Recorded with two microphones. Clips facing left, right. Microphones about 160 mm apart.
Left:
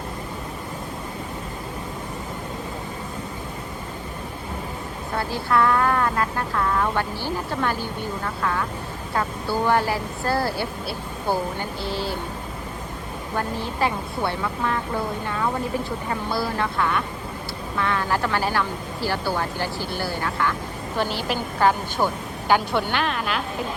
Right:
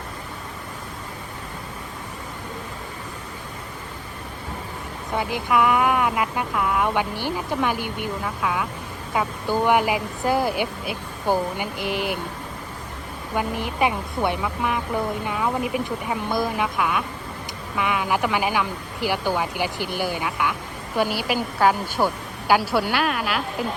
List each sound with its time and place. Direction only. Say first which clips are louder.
5.1 s speech: right 1 dB; 15° right (ahead or behind)
13.3 s speech: right 2 dB; 15° right (ahead or behind)